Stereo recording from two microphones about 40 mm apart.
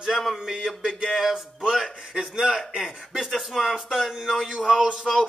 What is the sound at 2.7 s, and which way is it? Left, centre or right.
Music, centre.